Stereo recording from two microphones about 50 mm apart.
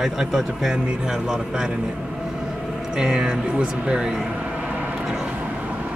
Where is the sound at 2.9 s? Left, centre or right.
Centre.